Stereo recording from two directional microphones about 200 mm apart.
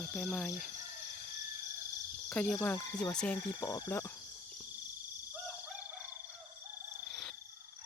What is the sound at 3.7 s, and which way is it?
Speech, 15° left (ahead or behind).